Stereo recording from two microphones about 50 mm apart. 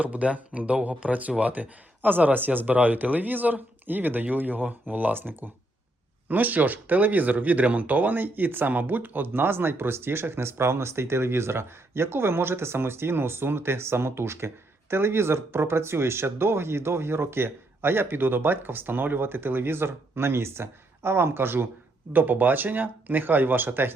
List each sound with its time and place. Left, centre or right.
0.0 s speech: right
22.1 s speech: right